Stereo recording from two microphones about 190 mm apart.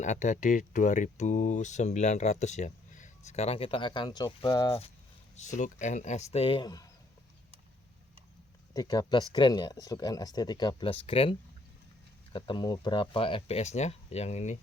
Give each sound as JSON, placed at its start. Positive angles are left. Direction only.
{"t": 0.0, "sound": "speech", "side_deg": 40}
{"t": 5.5, "sound": "speech", "side_deg": 40}
{"t": 8.7, "sound": "speech", "side_deg": 20}